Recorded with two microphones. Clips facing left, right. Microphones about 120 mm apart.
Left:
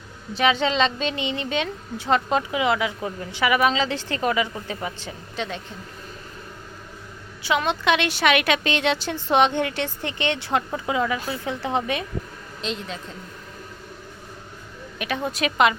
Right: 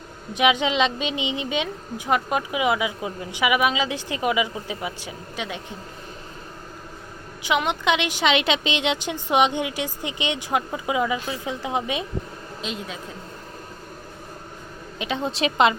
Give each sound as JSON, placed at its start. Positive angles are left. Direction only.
{"t": 0.3, "sound": "a woman's voice", "side_deg": -15}
{"t": 7.4, "sound": "a woman's voice", "side_deg": -15}
{"t": 14.9, "sound": "a woman's voice", "side_deg": -20}